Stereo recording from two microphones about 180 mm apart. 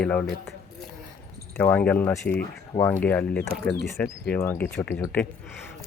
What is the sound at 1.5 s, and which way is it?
Speech, 10° left (ahead or behind).